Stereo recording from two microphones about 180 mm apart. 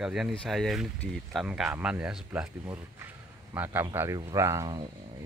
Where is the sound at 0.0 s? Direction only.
Centre (ahead or behind).